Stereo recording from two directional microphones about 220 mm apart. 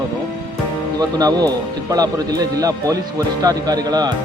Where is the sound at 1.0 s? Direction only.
15° right (ahead or behind).